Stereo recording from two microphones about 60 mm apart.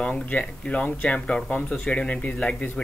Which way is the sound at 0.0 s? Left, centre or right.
Left.